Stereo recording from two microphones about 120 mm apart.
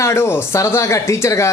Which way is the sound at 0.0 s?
20° left (ahead or behind).